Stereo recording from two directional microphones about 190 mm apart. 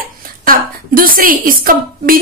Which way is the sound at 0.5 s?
50° right (ahead or behind).